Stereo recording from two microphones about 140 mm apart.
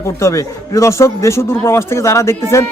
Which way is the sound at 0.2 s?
20° left (ahead or behind).